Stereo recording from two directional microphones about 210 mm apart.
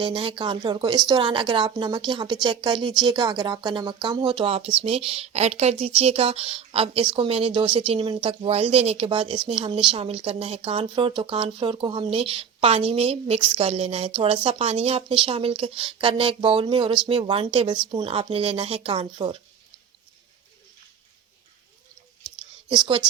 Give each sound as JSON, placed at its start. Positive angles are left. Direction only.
{"t": 0.0, "sound": "speech", "side_deg": -25}
{"t": 22.7, "sound": "speech", "side_deg": -25}